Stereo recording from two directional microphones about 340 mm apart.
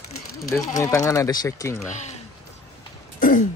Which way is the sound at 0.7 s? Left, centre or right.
Centre.